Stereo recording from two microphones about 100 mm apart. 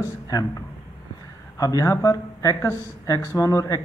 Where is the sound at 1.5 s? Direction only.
35° left (ahead or behind).